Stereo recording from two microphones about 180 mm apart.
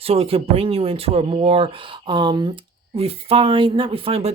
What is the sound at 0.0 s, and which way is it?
Speech, 35° right (ahead or behind).